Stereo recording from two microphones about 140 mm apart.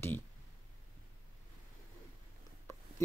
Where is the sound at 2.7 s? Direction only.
20° left (ahead or behind).